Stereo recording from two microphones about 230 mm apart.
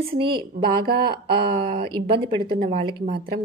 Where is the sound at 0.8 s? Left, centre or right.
Right.